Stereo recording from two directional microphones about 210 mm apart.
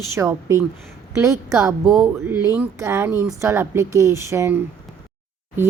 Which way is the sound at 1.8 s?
Centre (ahead or behind).